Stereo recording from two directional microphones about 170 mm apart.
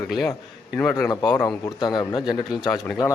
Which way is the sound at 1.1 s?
25° left (ahead or behind).